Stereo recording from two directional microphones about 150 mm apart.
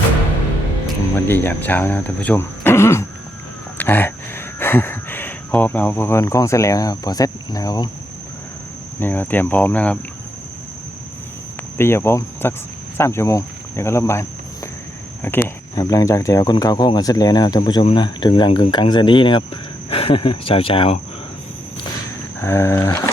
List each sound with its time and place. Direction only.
1.1 s speech: 15° left (ahead or behind)
9.0 s speech: 15° left (ahead or behind)
11.8 s speech: 15° left (ahead or behind)
15.7 s speech: 25° left (ahead or behind)
22.4 s speech: 15° left (ahead or behind)